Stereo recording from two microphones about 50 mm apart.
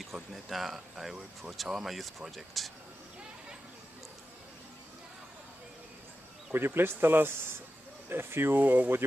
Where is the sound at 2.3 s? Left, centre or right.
Centre.